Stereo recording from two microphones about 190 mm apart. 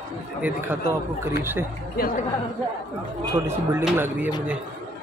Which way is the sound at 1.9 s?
50° left (ahead or behind).